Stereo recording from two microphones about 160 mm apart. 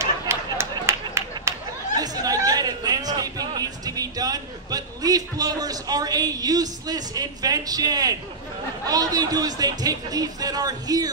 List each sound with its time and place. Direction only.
0.0 s a sound: 15° right (ahead or behind)
2.0 s chatter: 20° right (ahead or behind)
8.8 s a man's voice: 25° right (ahead or behind)